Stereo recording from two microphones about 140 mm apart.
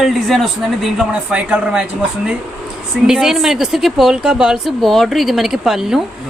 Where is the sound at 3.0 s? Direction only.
5° right (ahead or behind).